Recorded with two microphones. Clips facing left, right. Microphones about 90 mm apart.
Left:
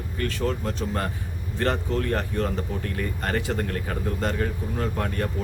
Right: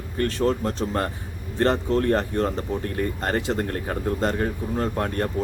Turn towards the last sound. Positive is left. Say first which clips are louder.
# right 3 dB
turn(degrees=-40)  # may be behind; listen again after turning